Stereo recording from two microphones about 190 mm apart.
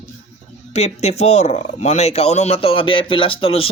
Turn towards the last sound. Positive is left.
turn(degrees=30)  # may be behind; listen again after turning